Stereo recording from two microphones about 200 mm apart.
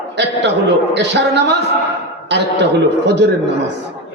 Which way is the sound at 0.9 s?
60° right (ahead or behind).